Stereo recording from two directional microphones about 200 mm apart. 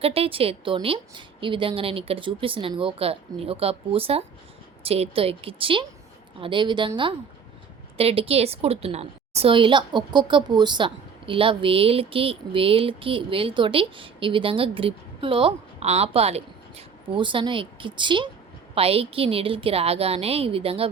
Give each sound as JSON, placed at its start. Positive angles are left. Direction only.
{"t": 0.0, "sound": "a woman's voice", "side_deg": -30}